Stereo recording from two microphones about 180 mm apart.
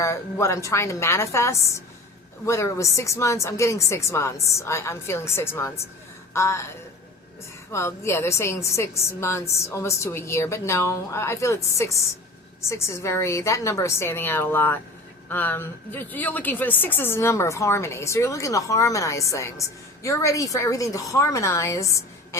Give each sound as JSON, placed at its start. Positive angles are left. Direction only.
{"t": 0.0, "sound": "a woman's voice", "side_deg": 15}
{"t": 7.7, "sound": "a woman's voice", "side_deg": 15}